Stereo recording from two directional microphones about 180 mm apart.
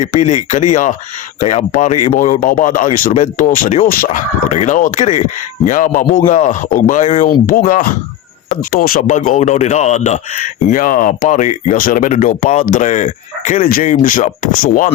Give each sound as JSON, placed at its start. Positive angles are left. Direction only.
{"t": 0.0, "sound": "speech", "side_deg": 40}